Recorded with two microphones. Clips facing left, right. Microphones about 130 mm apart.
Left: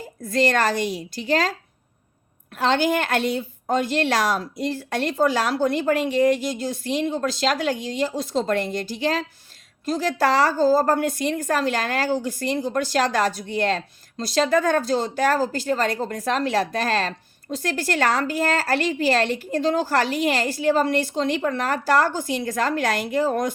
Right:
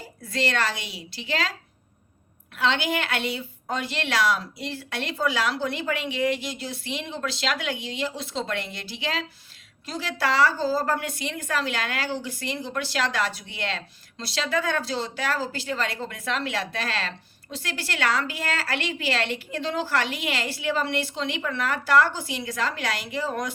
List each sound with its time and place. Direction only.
0.2 s a woman's voice: 45° left (ahead or behind)
2.6 s a woman's voice: 45° left (ahead or behind)